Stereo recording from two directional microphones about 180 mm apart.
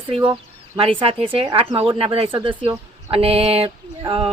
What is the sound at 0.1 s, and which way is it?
Speech, 30° right (ahead or behind).